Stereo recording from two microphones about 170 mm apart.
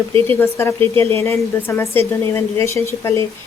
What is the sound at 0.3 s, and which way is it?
A woman's voice, 15° left (ahead or behind).